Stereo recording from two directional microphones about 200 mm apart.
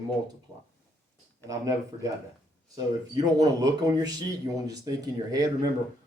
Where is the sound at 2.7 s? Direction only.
20° right (ahead or behind).